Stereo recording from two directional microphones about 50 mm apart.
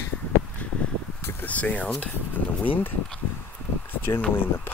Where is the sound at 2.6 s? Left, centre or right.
Left.